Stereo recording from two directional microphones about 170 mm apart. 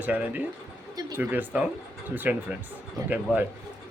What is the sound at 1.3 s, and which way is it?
Speech, 10° right (ahead or behind).